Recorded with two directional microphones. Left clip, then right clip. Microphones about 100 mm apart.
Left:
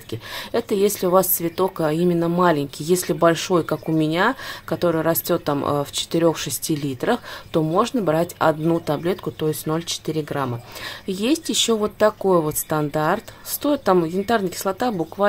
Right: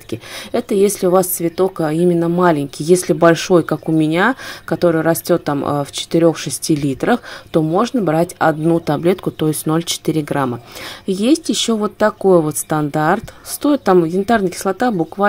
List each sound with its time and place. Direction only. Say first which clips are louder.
0.1 s a woman's voice: right 3 dB; 30° right (ahead or behind)
6.7 s speech: right 6 dB; 40° right (ahead or behind)
7.5 s a woman's voice: right 4 dB; 25° right (ahead or behind)
8.7 s speech: right 6 dB; 40° right (ahead or behind); by 10.5 s 55° right (ahead or behind)
11.1 s speech: right 7 dB; 35° right (ahead or behind)